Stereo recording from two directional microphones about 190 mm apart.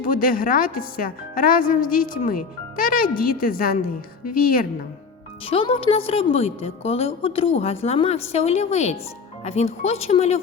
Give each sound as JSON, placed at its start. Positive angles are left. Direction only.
{"t": 0.0, "sound": "speech", "side_deg": 50}
{"t": 5.5, "sound": "a woman's voice", "side_deg": 30}